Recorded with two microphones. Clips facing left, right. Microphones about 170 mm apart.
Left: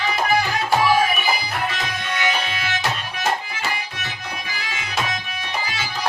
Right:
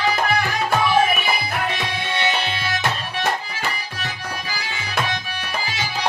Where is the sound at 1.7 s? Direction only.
30° right (ahead or behind).